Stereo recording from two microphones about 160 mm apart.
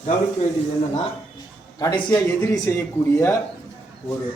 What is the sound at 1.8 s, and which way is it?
A man's voice, 25° left (ahead or behind).